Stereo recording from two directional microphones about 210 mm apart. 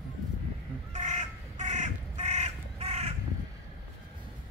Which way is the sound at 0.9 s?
35° right (ahead or behind).